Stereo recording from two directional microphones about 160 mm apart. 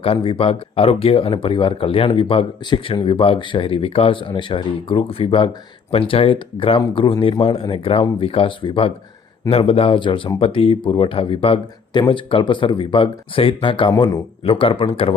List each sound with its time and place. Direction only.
0.0 s speech: 35° left (ahead or behind)